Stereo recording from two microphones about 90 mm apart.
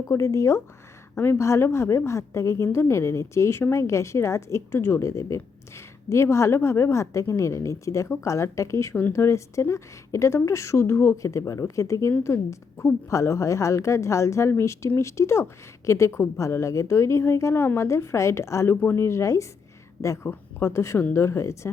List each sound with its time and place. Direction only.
0.1 s a woman's voice: 35° left (ahead or behind)